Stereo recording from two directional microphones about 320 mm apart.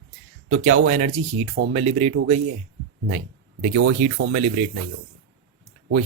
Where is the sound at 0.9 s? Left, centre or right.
Centre.